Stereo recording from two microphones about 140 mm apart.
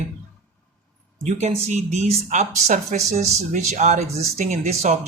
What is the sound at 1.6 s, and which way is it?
Speech, 55° right (ahead or behind).